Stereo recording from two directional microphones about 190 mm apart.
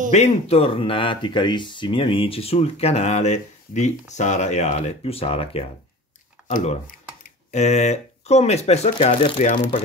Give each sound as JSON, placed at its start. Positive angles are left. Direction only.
{"t": 0.1, "sound": "speech", "side_deg": 35}